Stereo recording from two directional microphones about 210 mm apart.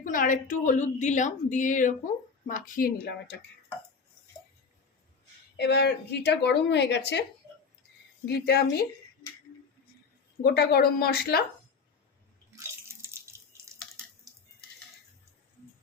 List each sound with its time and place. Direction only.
0.0 s a woman's voice: 40° left (ahead or behind)
5.5 s speech: 55° left (ahead or behind)
8.3 s speech: 50° left (ahead or behind)
10.4 s speech: 50° left (ahead or behind)
12.5 s drip: 15° right (ahead or behind)
14.3 s a sound: 15° right (ahead or behind)